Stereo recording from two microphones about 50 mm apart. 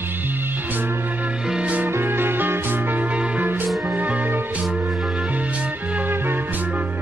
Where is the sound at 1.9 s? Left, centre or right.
Right.